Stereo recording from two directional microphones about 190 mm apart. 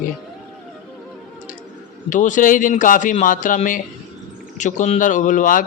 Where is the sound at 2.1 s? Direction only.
40° left (ahead or behind).